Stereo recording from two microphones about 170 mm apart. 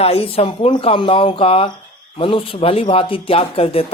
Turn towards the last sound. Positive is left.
turn(degrees=35)  # may be behind; listen again after turning